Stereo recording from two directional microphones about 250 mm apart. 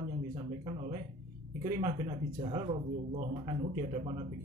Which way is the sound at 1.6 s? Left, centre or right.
Centre.